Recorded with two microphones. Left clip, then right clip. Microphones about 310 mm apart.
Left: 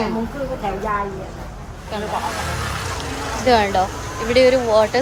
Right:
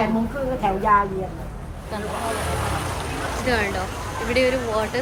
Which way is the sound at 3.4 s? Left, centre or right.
Centre.